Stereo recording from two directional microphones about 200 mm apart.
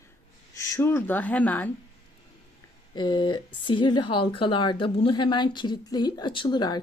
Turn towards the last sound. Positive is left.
turn(degrees=20)  # may be behind; listen again after turning